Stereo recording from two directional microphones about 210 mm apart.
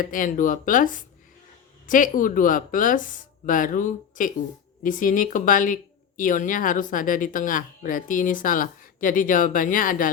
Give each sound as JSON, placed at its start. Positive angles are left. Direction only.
{"t": 0.0, "sound": "speech", "side_deg": 40}